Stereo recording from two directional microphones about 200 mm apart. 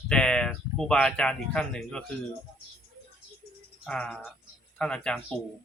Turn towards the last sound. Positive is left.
turn(degrees=5)  # may be behind; listen again after turning